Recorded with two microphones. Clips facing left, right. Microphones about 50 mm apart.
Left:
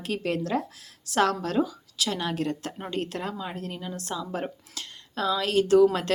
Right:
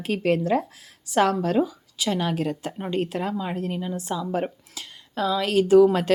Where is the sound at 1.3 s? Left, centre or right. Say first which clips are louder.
Right 4 dB; centre.